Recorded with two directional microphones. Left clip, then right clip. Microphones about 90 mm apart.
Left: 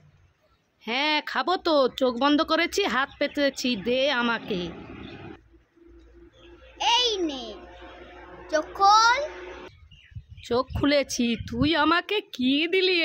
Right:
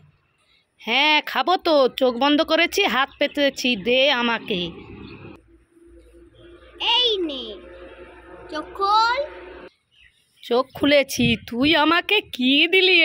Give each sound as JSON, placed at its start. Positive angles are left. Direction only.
{"t": 0.7, "sound": "speech", "side_deg": -25}
{"t": 6.8, "sound": "a sound", "side_deg": 30}
{"t": 8.5, "sound": "a child's voice", "side_deg": 35}
{"t": 10.4, "sound": "speech", "side_deg": -15}